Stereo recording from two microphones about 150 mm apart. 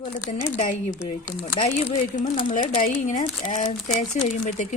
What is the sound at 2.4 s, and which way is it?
A woman's voice, 60° left (ahead or behind).